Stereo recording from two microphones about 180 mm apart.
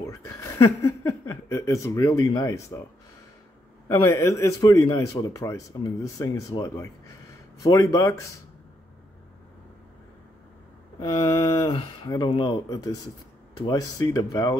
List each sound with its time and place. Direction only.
0.0 s a sound: 15° left (ahead or behind)
0.7 s speech: 15° left (ahead or behind)
3.9 s a man's voice: 15° left (ahead or behind)
11.0 s speech: 20° left (ahead or behind)